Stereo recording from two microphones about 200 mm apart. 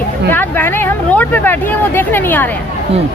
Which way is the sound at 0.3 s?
10° left (ahead or behind).